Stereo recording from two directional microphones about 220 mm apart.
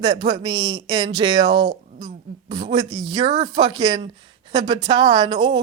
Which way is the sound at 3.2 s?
25° right (ahead or behind).